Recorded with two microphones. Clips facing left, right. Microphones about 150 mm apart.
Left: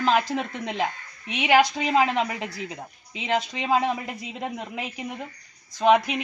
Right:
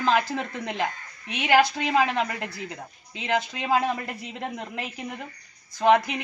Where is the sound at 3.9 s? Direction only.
5° left (ahead or behind).